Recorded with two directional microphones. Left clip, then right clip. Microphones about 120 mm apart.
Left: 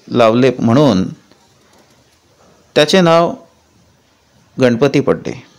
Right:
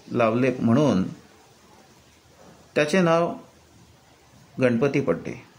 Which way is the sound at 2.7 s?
90° left.